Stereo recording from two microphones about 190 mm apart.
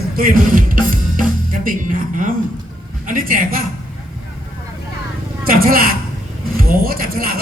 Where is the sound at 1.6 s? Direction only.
45° right (ahead or behind).